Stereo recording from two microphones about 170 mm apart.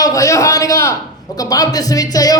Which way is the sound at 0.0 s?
20° left (ahead or behind).